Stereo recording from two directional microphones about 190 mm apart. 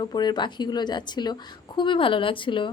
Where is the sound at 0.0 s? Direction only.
20° left (ahead or behind).